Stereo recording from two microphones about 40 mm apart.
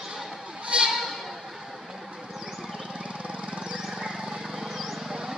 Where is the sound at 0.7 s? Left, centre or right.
Right.